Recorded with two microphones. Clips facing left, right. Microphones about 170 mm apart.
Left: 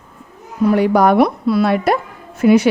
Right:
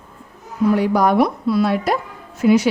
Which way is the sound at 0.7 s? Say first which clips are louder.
Left 4 dB; 65° left (ahead or behind).